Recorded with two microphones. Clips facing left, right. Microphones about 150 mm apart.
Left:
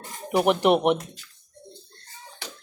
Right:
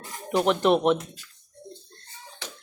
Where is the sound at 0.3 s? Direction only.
10° left (ahead or behind).